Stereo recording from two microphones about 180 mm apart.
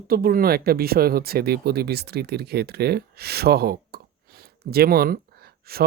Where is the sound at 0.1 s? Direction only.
55° right (ahead or behind).